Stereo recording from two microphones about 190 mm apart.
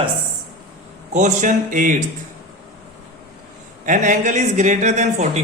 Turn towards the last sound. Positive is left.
turn(degrees=-40)  # may be behind; listen again after turning